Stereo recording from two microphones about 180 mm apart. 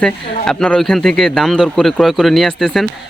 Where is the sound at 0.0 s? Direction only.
5° left (ahead or behind).